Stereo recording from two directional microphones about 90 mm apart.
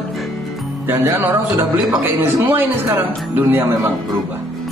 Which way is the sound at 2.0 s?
25° right (ahead or behind).